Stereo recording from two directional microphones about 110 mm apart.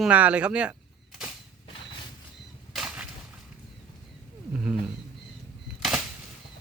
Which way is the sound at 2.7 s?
5° right (ahead or behind).